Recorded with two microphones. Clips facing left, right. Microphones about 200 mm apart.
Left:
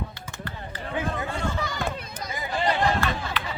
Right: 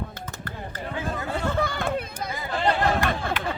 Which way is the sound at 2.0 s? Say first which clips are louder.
Right 3 dB; 55° right (ahead or behind).